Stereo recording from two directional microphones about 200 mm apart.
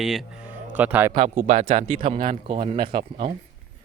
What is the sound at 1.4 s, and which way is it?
Speech, 35° right (ahead or behind).